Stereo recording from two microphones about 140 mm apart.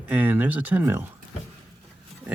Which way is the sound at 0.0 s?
10° right (ahead or behind).